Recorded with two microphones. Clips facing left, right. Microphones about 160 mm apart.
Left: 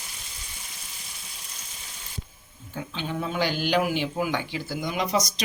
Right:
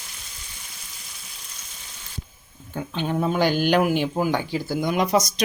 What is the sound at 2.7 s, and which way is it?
Speech, 55° right (ahead or behind).